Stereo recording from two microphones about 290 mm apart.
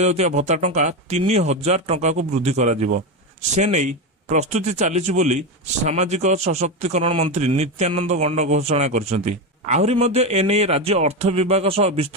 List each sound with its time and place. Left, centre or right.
0.0 s a man's voice: right